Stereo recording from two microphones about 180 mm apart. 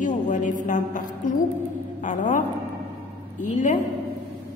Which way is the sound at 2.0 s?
45° left (ahead or behind).